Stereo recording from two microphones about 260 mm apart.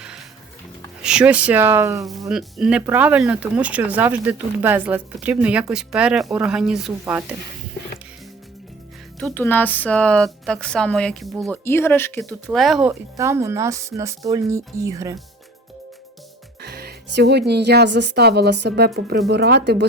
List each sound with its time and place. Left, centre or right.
1.0 s speech: centre
9.2 s speech: centre
12.9 s speech: centre
16.6 s speech: right